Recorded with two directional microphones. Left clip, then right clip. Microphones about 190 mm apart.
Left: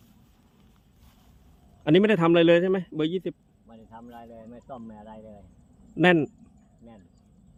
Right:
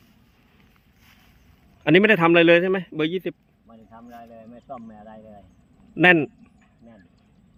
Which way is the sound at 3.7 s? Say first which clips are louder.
Right 1 dB; 15° left (ahead or behind).